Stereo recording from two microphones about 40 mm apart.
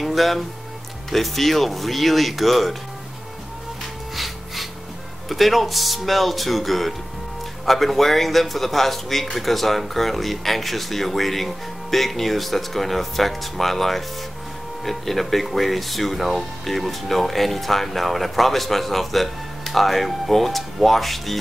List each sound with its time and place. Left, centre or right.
0.0 s music: centre
1.1 s speech: centre
4.1 s snort: centre
5.3 s speech: centre